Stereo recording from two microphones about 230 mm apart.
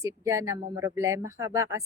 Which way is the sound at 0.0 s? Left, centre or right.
Centre.